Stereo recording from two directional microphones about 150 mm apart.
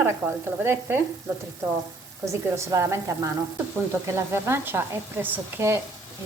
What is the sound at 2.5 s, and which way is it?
Speech, 20° right (ahead or behind).